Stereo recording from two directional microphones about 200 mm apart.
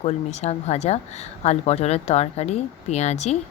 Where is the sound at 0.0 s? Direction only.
35° left (ahead or behind).